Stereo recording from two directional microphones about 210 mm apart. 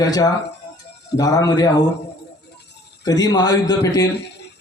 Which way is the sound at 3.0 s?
20° left (ahead or behind).